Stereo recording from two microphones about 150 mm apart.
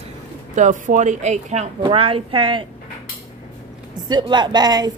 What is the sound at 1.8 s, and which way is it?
Speech, 35° right (ahead or behind).